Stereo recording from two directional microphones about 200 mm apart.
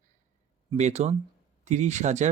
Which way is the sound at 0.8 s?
35° right (ahead or behind).